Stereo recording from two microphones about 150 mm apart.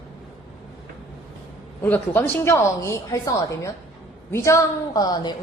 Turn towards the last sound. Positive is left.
turn(degrees=25)  # may be behind; listen again after turning